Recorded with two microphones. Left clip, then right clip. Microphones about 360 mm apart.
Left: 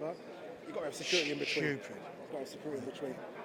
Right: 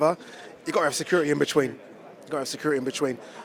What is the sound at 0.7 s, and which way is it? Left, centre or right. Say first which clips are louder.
Speech: right 12 dB; right.